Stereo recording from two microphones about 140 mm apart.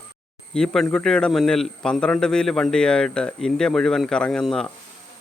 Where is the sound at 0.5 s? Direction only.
5° left (ahead or behind).